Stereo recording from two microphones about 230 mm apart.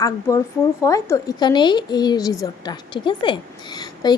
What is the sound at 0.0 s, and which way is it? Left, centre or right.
A woman's voice, centre.